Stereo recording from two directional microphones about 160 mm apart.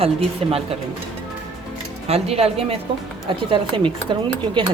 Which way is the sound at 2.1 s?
40° right (ahead or behind).